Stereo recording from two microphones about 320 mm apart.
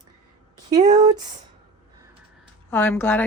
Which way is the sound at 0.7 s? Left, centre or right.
Centre.